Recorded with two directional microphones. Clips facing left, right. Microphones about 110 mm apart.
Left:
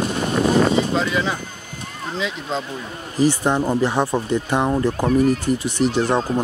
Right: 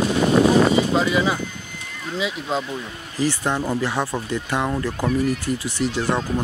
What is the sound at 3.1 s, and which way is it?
Speech, 15° left (ahead or behind).